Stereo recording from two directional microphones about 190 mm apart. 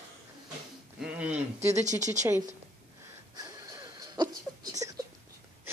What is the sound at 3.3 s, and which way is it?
Wheeze, 20° right (ahead or behind).